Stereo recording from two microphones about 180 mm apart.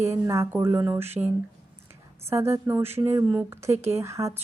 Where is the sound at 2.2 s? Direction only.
15° right (ahead or behind).